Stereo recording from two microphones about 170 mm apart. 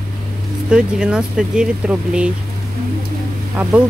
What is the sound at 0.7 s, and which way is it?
Speech, 5° right (ahead or behind).